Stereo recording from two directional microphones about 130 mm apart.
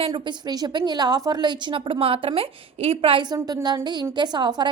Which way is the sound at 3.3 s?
30° right (ahead or behind).